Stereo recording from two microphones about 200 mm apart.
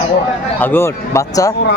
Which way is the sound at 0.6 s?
10° left (ahead or behind).